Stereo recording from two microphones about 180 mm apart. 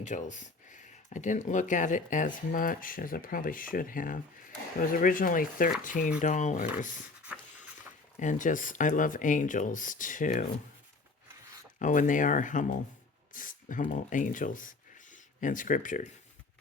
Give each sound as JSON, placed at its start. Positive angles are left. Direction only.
{"t": 0.0, "sound": "speech", "side_deg": 45}
{"t": 7.3, "sound": "pant", "side_deg": -10}
{"t": 8.2, "sound": "speech", "side_deg": 45}
{"t": 11.8, "sound": "speech", "side_deg": 45}